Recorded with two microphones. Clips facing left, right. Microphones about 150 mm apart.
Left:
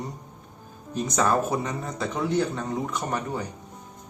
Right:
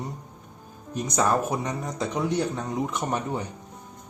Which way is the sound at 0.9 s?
15° right (ahead or behind).